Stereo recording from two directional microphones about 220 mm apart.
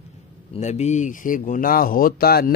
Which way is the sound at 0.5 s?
30° left (ahead or behind).